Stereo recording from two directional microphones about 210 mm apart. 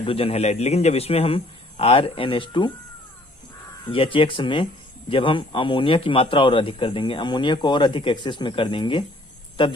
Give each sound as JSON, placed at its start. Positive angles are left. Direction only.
{"t": 0.0, "sound": "speech", "side_deg": 25}
{"t": 3.8, "sound": "speech", "side_deg": 25}